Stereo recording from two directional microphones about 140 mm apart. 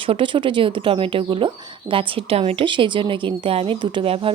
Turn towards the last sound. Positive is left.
turn(degrees=-40)  # may be behind; listen again after turning